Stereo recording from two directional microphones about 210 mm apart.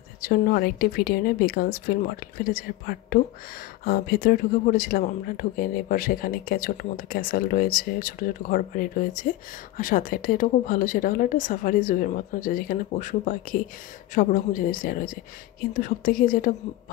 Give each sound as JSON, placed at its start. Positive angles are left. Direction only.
{"t": 0.2, "sound": "speech", "side_deg": 45}